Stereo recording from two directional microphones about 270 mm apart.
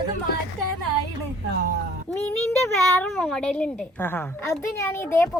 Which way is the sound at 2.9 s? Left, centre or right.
Centre.